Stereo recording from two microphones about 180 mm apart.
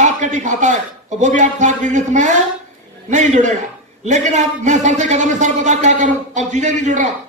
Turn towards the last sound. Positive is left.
turn(degrees=-40)  # may be behind; listen again after turning